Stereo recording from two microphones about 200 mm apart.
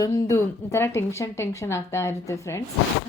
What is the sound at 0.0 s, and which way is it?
A woman's voice, 15° left (ahead or behind).